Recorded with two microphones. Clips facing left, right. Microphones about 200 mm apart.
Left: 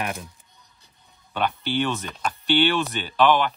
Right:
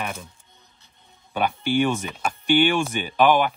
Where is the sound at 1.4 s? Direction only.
10° right (ahead or behind).